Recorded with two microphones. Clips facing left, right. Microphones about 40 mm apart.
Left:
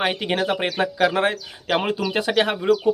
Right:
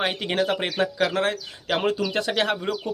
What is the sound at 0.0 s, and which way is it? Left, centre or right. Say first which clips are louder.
Speech: left 2 dB; centre.